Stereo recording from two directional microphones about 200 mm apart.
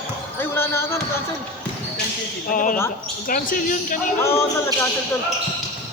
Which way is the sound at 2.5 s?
45° left (ahead or behind).